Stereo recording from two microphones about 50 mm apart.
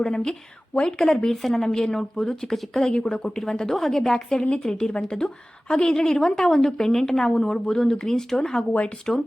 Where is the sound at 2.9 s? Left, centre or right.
Centre.